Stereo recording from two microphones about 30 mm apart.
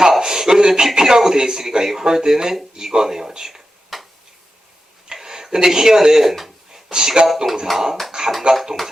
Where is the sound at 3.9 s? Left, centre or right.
Centre.